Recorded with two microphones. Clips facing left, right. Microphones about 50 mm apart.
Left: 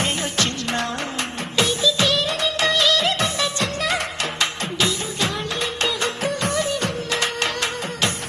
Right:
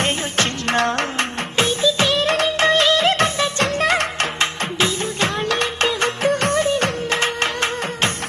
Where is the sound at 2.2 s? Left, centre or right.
Right.